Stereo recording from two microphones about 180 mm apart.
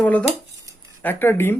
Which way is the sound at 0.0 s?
5° left (ahead or behind).